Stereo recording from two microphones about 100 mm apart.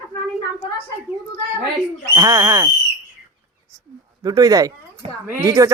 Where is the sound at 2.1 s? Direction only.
40° right (ahead or behind).